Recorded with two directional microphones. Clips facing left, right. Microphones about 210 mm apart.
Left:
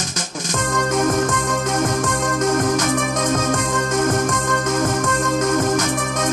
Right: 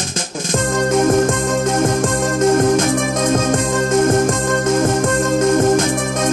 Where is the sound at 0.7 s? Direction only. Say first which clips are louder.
Right 4 dB; 30° right (ahead or behind).